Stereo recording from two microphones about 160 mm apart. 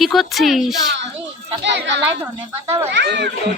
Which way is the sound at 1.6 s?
90° right.